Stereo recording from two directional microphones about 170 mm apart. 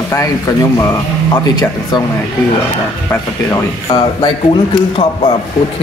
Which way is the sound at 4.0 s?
35° left (ahead or behind).